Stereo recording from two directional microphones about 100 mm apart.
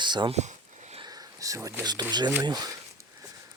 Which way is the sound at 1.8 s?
40° right (ahead or behind).